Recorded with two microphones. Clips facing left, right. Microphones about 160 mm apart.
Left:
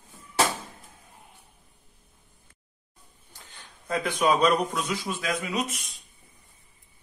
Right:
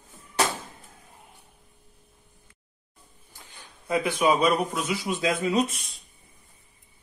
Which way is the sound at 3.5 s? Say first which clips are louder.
Right 3 dB; 10° right (ahead or behind).